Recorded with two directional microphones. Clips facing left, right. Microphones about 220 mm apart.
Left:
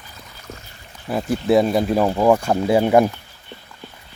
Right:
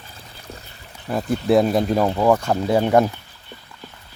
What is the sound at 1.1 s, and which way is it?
Speech, 5° left (ahead or behind).